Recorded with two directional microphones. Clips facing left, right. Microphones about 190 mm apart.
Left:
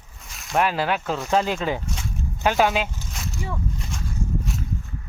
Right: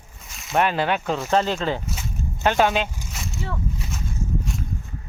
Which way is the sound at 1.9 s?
5° right (ahead or behind).